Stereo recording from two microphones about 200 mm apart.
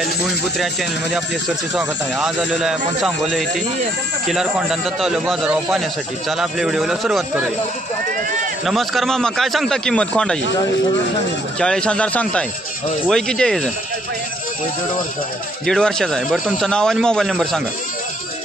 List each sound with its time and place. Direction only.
1.8 s speech: 5° right (ahead or behind)
8.6 s speech: centre (ahead or behind)
11.6 s speech: 5° left (ahead or behind)
15.6 s speech: centre (ahead or behind)